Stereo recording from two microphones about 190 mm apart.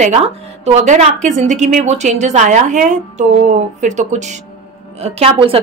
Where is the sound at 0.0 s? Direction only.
35° right (ahead or behind).